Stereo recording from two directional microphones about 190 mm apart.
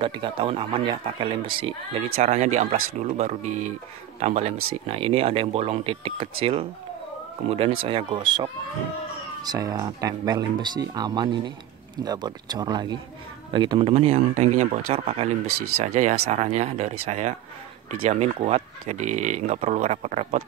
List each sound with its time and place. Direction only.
0.0 s speech: 25° right (ahead or behind)